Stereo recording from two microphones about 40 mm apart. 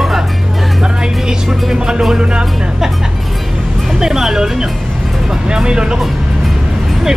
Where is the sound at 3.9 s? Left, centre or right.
Centre.